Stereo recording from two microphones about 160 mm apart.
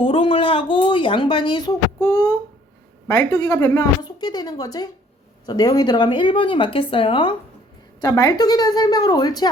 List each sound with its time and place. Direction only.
0.0 s speech: 35° left (ahead or behind)